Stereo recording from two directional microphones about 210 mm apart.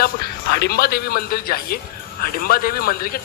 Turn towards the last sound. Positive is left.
turn(degrees=45)  # may be behind; listen again after turning